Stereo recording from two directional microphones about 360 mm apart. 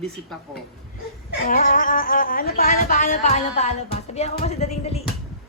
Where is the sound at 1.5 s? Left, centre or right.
Left.